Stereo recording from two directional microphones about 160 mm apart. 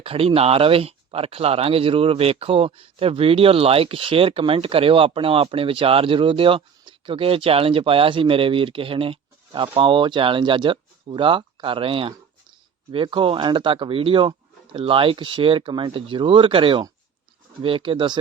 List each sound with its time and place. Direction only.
0.0 s speech: 35° right (ahead or behind)